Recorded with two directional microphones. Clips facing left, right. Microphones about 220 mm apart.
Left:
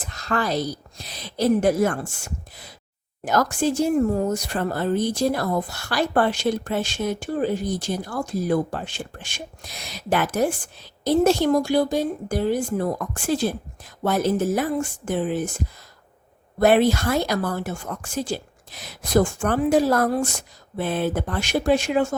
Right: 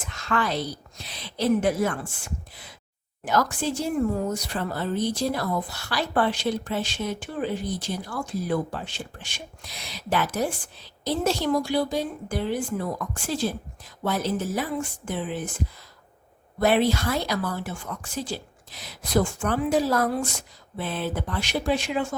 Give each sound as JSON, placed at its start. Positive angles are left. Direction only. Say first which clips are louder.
{"t": 0.0, "sound": "a woman's voice", "louder": "left 2 dB", "side_deg": 40}